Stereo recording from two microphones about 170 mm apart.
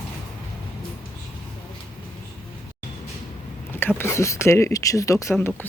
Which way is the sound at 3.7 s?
10° left (ahead or behind).